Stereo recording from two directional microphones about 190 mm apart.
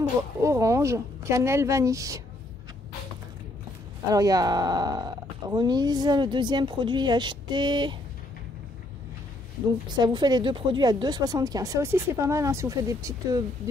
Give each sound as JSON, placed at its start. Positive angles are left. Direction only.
{"t": 0.4, "sound": "a woman's voice", "side_deg": -15}
{"t": 4.1, "sound": "speech", "side_deg": -20}
{"t": 9.9, "sound": "speech", "side_deg": -20}